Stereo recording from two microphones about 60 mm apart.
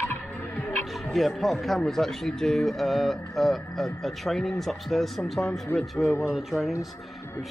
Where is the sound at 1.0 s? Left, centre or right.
Centre.